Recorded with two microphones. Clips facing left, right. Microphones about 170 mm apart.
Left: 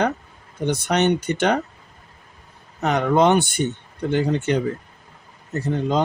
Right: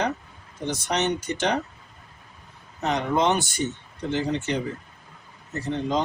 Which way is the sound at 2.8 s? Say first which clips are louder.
Left 5 dB; 60° left (ahead or behind).